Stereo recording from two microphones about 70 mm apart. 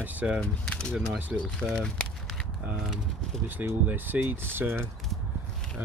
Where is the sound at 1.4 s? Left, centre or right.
Centre.